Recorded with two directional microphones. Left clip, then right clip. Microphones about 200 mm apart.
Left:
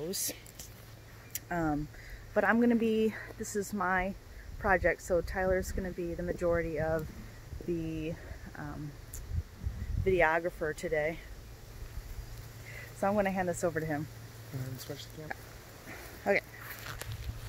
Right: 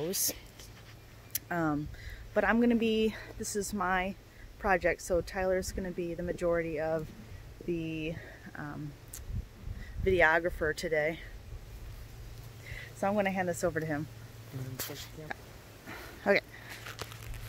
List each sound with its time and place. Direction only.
0.1 s speech: 35° right (ahead or behind)
1.3 s a sound: 20° right (ahead or behind)
2.3 s speech: 5° right (ahead or behind)
10.0 s speech: 30° right (ahead or behind)
13.0 s speech: centre (ahead or behind)
15.9 s a sound: 30° right (ahead or behind)